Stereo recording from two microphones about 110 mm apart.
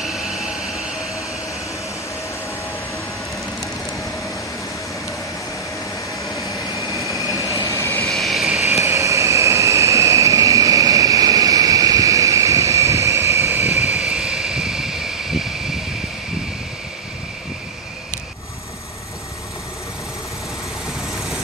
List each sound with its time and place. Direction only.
0.0 s vehicle: 5° right (ahead or behind)
7.6 s vehicle: 25° left (ahead or behind)
8.1 s vehicle: centre (ahead or behind)
8.6 s vehicle: 25° right (ahead or behind)
13.7 s vehicle: 90° left
13.9 s vehicle: 5° right (ahead or behind)